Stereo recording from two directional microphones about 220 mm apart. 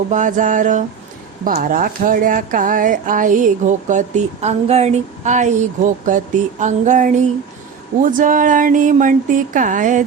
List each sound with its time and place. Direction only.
0.1 s speech: 35° right (ahead or behind)